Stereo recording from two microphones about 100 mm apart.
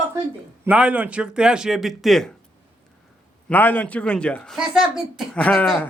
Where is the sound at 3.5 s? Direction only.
20° left (ahead or behind).